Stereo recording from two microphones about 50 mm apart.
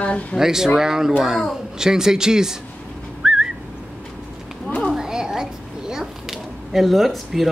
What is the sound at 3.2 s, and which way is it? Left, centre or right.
Whistling, centre.